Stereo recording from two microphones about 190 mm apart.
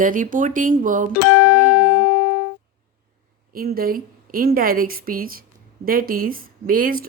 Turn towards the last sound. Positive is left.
turn(degrees=-45)  # may be behind; listen again after turning